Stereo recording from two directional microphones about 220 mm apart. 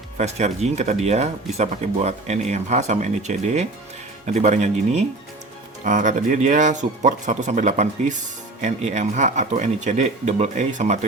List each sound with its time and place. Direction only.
0.2 s speech: 30° right (ahead or behind)